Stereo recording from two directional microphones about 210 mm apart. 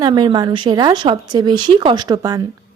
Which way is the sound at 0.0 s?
20° right (ahead or behind).